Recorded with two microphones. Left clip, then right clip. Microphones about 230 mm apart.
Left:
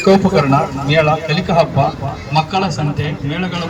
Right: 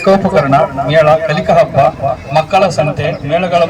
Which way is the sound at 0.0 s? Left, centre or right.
Centre.